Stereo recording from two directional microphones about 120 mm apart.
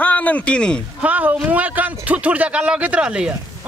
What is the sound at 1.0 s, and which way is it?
Speech, 10° right (ahead or behind).